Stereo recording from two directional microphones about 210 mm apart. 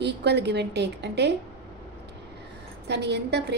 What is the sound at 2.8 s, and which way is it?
Speech, 55° right (ahead or behind).